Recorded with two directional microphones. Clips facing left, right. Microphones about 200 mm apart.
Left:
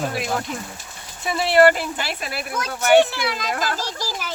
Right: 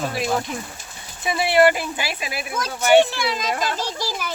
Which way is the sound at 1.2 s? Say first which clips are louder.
Left 1 dB; 15° right (ahead or behind).